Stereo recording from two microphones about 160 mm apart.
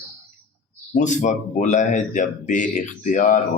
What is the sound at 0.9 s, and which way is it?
Speech, 50° left (ahead or behind).